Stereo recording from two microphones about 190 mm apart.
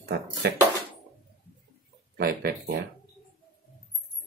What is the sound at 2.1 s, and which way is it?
Speech, 55° right (ahead or behind).